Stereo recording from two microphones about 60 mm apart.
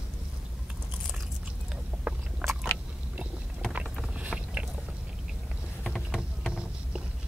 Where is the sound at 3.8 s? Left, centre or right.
Centre.